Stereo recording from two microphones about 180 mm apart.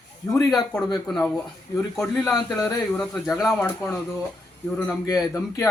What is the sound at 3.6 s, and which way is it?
A man's voice, 15° left (ahead or behind).